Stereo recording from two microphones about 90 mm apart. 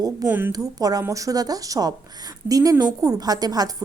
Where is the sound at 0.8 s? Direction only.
45° right (ahead or behind).